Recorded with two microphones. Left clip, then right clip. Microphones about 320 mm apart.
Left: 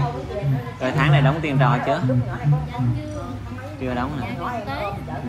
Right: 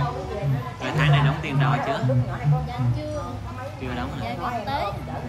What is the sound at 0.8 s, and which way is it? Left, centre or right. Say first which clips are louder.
Speech: left 4 dB; centre.